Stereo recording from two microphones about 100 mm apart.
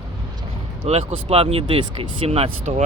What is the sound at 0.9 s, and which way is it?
Speech, 85° right.